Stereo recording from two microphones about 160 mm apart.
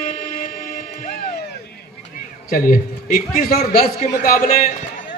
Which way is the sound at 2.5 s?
60° left (ahead or behind).